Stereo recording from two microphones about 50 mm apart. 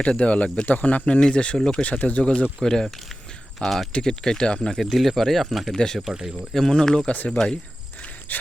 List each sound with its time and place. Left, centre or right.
0.0 s speech: left
1.8 s speech: left
3.9 s speech: centre
4.8 s speech: centre
5.7 s speech: centre
6.1 s speech: centre
6.5 s speech: centre
8.3 s pant: left